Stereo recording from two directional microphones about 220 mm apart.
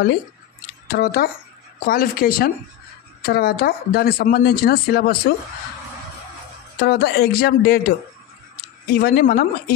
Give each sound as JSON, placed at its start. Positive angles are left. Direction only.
{"t": 0.9, "sound": "speech", "side_deg": 40}
{"t": 6.8, "sound": "speech", "side_deg": 45}
{"t": 8.9, "sound": "speech", "side_deg": 45}